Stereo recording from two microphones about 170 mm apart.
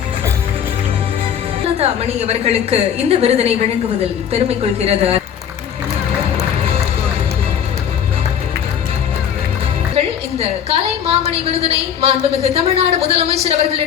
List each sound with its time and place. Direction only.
1.8 s a woman's voice: 40° right (ahead or behind)
9.9 s a sound: 35° right (ahead or behind)
11.6 s a woman's voice: 35° right (ahead or behind)